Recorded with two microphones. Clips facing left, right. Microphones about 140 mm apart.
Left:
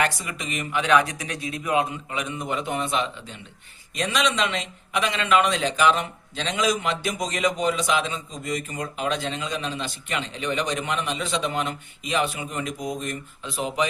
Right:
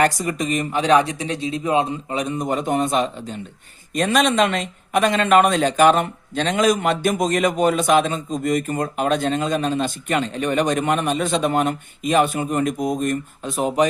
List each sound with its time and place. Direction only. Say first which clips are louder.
0.0 s speech: right 7 dB; 40° right (ahead or behind)